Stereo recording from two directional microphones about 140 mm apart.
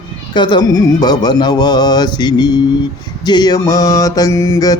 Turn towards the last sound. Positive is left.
turn(degrees=25)  # may be behind; listen again after turning